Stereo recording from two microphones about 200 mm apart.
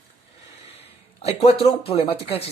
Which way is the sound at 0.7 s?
30° left (ahead or behind).